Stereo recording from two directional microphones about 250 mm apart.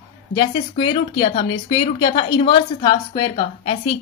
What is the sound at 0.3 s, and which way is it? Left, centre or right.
Speech, centre.